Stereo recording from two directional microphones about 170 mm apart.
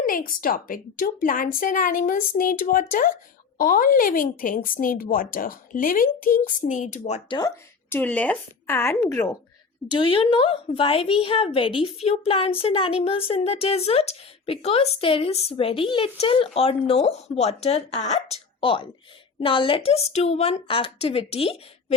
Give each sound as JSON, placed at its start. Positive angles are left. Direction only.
{"t": 0.0, "sound": "speech", "side_deg": 55}
{"t": 7.3, "sound": "speech", "side_deg": 25}
{"t": 7.9, "sound": "a woman's voice", "side_deg": 10}